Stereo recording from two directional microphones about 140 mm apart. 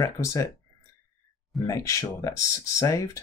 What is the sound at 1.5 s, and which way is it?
Speech, 25° left (ahead or behind).